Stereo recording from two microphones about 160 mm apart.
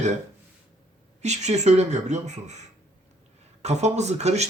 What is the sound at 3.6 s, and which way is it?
Speech, 45° right (ahead or behind).